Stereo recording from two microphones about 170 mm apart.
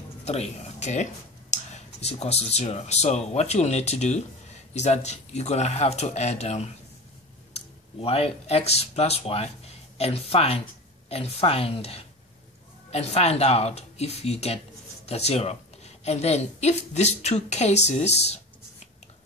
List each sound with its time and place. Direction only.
0.2 s a woman's voice: 40° left (ahead or behind)